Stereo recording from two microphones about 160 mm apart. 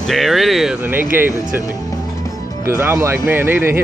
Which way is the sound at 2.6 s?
15° right (ahead or behind).